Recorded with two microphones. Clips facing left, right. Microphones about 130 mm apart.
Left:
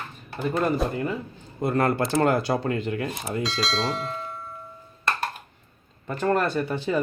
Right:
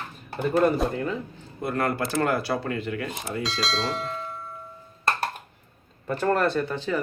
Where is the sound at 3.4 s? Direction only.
Centre (ahead or behind).